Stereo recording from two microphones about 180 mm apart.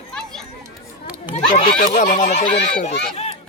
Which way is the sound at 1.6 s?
50° left (ahead or behind).